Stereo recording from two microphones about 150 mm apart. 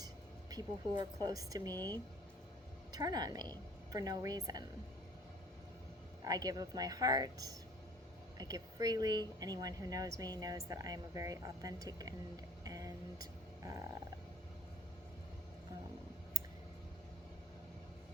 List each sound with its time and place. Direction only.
0.5 s speech: 25° right (ahead or behind)
1.7 s speech: 15° left (ahead or behind)
2.9 s speech: 25° right (ahead or behind)
6.2 s speech: 25° right (ahead or behind)
12.6 s a sound: 25° right (ahead or behind)